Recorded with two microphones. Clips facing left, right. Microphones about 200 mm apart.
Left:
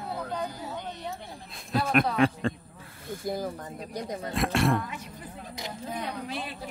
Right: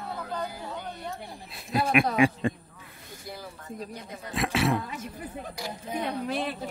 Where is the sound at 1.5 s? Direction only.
5° right (ahead or behind).